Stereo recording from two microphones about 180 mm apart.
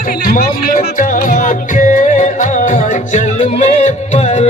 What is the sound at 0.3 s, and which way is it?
Music, 55° left (ahead or behind).